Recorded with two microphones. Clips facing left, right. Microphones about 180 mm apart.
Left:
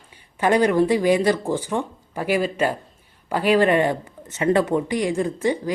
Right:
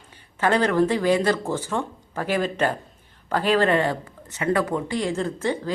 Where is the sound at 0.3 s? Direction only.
15° left (ahead or behind).